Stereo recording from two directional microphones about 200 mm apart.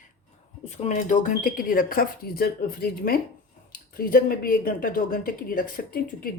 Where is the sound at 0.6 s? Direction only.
35° left (ahead or behind).